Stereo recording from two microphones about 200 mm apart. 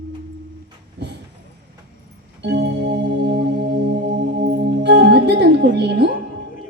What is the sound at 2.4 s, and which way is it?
Organ, 55° right (ahead or behind).